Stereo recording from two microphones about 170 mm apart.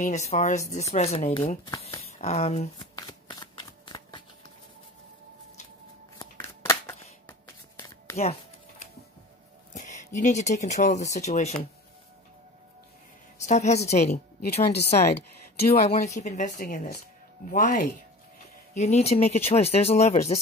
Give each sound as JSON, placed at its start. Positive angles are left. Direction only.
{"t": 0.0, "sound": "speech", "side_deg": 45}
{"t": 2.8, "sound": "shuffling cards", "side_deg": 25}
{"t": 6.1, "sound": "a sound", "side_deg": 15}
{"t": 8.2, "sound": "music", "side_deg": 40}
{"t": 9.8, "sound": "speech", "side_deg": 45}
{"t": 13.4, "sound": "speech", "side_deg": 45}
{"t": 15.8, "sound": "speech", "side_deg": 40}
{"t": 18.8, "sound": "speech", "side_deg": 40}